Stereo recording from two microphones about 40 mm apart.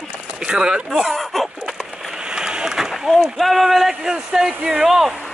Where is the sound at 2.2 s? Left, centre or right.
Centre.